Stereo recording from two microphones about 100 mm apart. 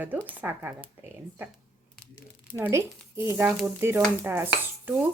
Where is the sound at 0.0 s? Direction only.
15° right (ahead or behind).